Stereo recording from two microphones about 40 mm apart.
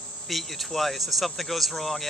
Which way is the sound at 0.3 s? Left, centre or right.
Centre.